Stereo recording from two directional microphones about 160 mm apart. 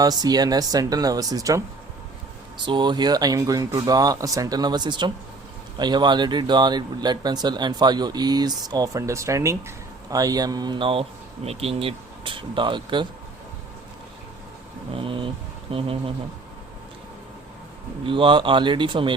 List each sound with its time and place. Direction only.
0.0 s speech: 25° right (ahead or behind)
2.6 s speech: 30° right (ahead or behind)
14.9 s speech: 30° right (ahead or behind)
18.0 s speech: 30° right (ahead or behind)